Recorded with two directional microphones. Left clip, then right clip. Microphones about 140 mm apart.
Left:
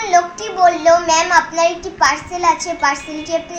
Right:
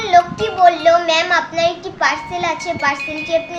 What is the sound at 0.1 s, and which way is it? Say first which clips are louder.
A child's voice: right 3 dB; 15° right (ahead or behind).